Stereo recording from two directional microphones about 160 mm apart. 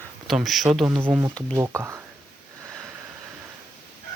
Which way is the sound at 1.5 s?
15° right (ahead or behind).